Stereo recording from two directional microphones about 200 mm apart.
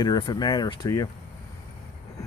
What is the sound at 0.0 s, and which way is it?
Speech, 20° left (ahead or behind).